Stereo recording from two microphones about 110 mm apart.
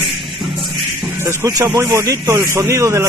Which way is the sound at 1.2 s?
30° right (ahead or behind).